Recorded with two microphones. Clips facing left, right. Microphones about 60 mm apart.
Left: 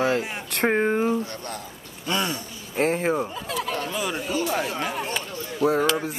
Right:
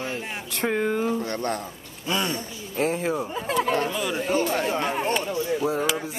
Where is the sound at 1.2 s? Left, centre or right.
Right.